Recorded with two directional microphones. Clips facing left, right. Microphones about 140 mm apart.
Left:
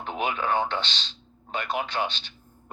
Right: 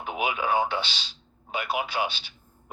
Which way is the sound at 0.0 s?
10° right (ahead or behind).